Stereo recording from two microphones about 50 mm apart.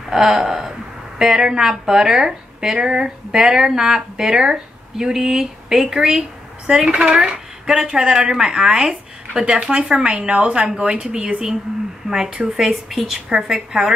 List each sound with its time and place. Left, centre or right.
0.1 s speech: centre